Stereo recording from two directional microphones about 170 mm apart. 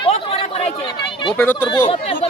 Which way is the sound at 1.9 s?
35° left (ahead or behind).